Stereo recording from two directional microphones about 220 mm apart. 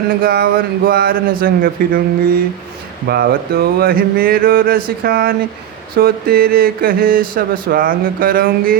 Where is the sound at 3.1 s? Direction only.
45° right (ahead or behind).